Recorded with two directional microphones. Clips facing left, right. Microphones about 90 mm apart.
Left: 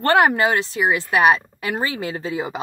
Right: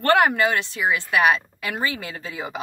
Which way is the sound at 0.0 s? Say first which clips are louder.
Left 2 dB; 30° left (ahead or behind).